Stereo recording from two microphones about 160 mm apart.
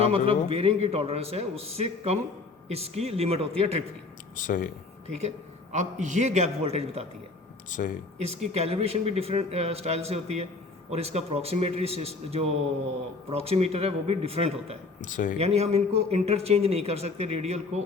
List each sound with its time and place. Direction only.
0.0 s speech: 40° right (ahead or behind)
4.4 s speech: 55° left (ahead or behind)
5.0 s a man's voice: 45° right (ahead or behind)
7.7 s speech: 55° left (ahead or behind)
8.2 s speech: 40° right (ahead or behind)
15.0 s speech: 55° left (ahead or behind)
15.4 s speech: 40° right (ahead or behind)